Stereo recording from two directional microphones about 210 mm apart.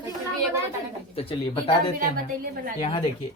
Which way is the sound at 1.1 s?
25° left (ahead or behind).